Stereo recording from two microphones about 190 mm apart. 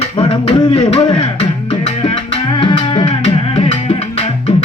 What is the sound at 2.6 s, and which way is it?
Music, 25° left (ahead or behind).